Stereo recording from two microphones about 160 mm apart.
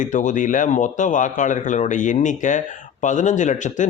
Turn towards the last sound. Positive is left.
turn(degrees=50)  # may be behind; listen again after turning